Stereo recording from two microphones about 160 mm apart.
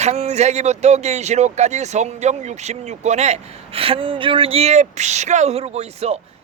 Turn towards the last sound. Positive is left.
turn(degrees=-40)  # may be behind; listen again after turning